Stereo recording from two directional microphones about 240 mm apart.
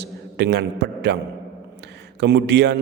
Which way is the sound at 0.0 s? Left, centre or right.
Right.